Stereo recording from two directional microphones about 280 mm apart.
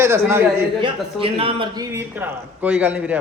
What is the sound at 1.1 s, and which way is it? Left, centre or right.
A man's voice, centre.